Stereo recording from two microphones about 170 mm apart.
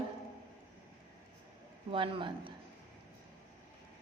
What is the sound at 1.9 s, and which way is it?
Speech, 30° right (ahead or behind).